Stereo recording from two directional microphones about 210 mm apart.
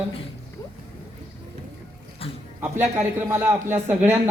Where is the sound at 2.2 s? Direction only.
25° left (ahead or behind).